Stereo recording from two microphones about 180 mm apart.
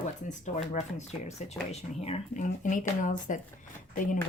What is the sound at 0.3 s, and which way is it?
Speech, 45° left (ahead or behind).